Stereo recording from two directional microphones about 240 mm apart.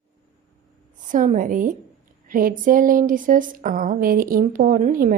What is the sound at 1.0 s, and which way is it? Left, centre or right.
A woman's voice, right.